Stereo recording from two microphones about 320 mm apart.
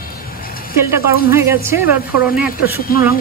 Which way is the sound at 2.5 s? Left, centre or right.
Left.